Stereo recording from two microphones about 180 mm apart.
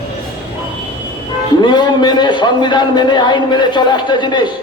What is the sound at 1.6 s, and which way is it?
A man's voice, 25° left (ahead or behind).